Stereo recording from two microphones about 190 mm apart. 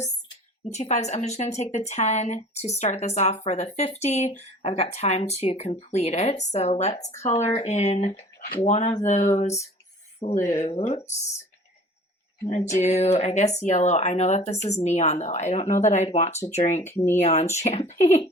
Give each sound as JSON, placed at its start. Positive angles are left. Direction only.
{"t": 0.7, "sound": "speech", "side_deg": 35}
{"t": 12.5, "sound": "speech", "side_deg": 35}